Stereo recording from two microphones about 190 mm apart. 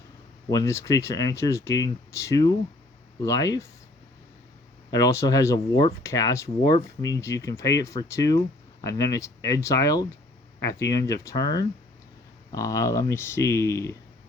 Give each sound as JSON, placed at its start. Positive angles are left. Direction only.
{"t": 0.5, "sound": "speech", "side_deg": 15}
{"t": 4.9, "sound": "speech", "side_deg": 20}